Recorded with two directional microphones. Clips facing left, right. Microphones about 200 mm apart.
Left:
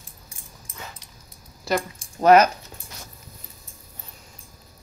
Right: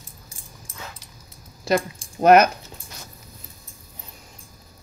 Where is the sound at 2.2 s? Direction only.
55° right (ahead or behind).